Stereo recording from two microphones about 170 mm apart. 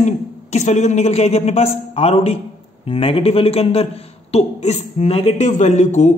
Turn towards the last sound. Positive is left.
turn(degrees=40)  # may be behind; listen again after turning